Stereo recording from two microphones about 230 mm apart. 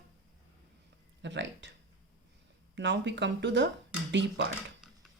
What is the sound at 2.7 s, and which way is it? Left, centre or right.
Speech, right.